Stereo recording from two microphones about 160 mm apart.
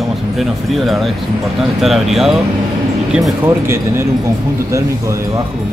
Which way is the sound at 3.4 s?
15° right (ahead or behind).